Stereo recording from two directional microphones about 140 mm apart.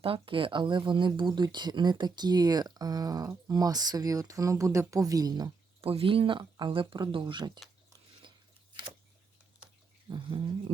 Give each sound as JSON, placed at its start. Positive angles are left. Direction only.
{"t": 0.0, "sound": "speech", "side_deg": -40}
{"t": 5.8, "sound": "speech", "side_deg": -45}
{"t": 10.1, "sound": "speech", "side_deg": -35}